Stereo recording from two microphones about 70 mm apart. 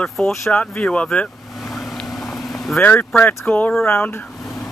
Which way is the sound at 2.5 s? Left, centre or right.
Centre.